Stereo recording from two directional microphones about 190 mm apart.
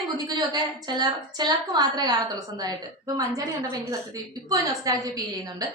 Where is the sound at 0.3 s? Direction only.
20° right (ahead or behind).